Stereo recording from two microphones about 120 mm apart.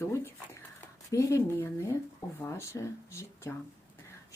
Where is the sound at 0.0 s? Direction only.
25° left (ahead or behind).